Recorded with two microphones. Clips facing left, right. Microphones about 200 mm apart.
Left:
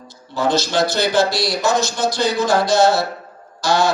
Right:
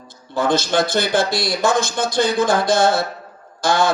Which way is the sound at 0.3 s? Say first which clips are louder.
Even; 50° right (ahead or behind).